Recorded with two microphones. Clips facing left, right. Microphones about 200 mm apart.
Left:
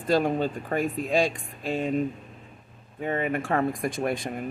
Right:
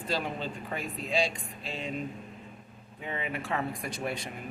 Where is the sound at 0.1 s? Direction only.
50° left (ahead or behind).